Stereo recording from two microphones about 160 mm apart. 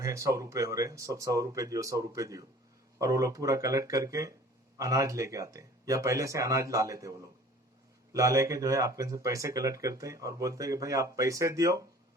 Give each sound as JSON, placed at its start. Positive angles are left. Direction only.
{"t": 0.0, "sound": "speech", "side_deg": -20}